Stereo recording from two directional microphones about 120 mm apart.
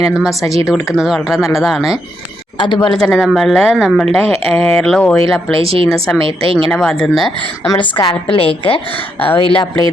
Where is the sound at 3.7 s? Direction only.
5° right (ahead or behind).